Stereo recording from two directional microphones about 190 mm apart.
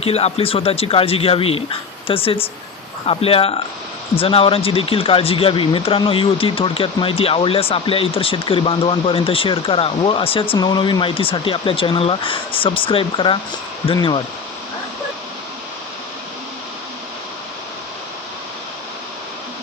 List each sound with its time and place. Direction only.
0.0 s a man's voice: 30° left (ahead or behind)